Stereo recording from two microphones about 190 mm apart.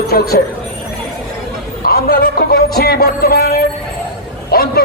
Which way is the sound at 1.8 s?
50° left (ahead or behind).